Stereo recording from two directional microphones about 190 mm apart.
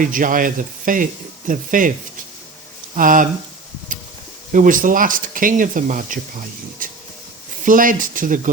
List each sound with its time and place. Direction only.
0.0 s speech: 45° right (ahead or behind)
2.9 s speech: 45° right (ahead or behind)
4.5 s speech: 45° right (ahead or behind)
7.6 s speech: 45° right (ahead or behind)